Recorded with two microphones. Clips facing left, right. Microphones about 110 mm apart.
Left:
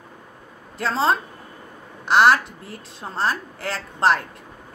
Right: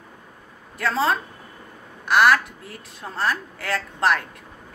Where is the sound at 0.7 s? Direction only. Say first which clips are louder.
Left 1 dB; 25° left (ahead or behind).